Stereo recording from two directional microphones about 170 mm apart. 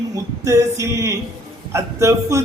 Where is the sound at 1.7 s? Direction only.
15° right (ahead or behind).